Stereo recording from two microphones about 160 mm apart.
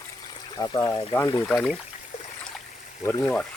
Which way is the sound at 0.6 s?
25° left (ahead or behind).